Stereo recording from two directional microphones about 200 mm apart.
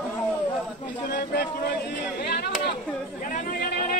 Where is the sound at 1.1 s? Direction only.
55° left (ahead or behind).